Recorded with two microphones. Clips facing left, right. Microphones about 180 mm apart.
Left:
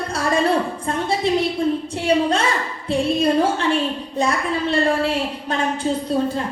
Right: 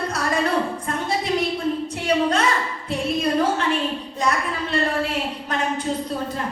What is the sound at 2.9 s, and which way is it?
Music, 30° left (ahead or behind).